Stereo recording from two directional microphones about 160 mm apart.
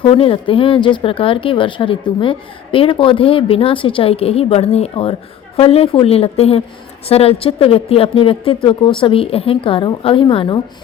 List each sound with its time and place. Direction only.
0.0 s speech: 35° left (ahead or behind)